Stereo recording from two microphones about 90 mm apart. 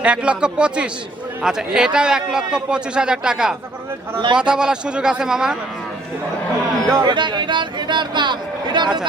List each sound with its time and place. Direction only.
0.0 s a man's voice: 15° right (ahead or behind)
7.0 s speech: 60° right (ahead or behind)